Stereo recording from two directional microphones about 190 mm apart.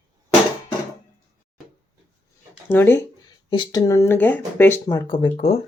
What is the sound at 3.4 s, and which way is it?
Speech, 25° left (ahead or behind).